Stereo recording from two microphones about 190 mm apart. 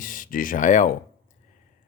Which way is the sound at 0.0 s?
45° left (ahead or behind).